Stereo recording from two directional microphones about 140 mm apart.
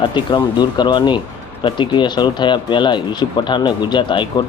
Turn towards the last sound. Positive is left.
turn(degrees=35)  # may be behind; listen again after turning